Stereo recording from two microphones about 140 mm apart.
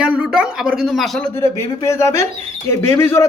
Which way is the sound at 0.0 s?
5° right (ahead or behind).